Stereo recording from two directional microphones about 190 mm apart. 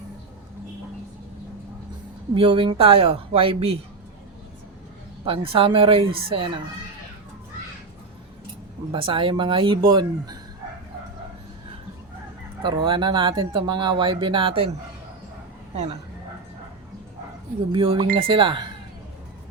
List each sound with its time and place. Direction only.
2.3 s speech: 30° right (ahead or behind)
5.2 s speech: 30° right (ahead or behind)
8.9 s speech: 25° right (ahead or behind)
12.6 s speech: 25° right (ahead or behind)
15.7 s speech: 35° right (ahead or behind)
17.7 s speech: 30° right (ahead or behind)